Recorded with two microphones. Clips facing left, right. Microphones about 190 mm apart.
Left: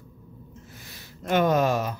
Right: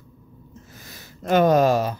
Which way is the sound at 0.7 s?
40° right (ahead or behind).